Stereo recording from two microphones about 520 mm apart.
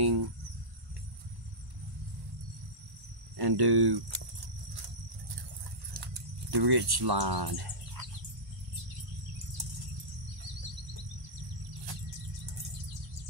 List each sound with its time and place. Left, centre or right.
0.0 s speech: right
3.3 s speech: right
6.5 s speech: right